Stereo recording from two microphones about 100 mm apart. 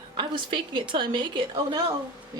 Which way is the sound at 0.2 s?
55° right (ahead or behind).